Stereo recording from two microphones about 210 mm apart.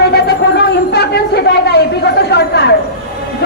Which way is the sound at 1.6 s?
50° left (ahead or behind).